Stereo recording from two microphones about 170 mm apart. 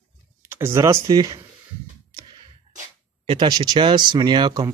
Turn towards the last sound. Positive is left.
turn(degrees=-25)  # may be behind; listen again after turning